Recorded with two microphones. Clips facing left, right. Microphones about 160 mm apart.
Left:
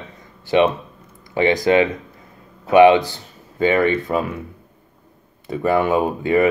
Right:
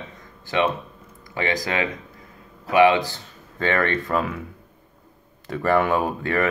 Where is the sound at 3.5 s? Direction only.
10° left (ahead or behind).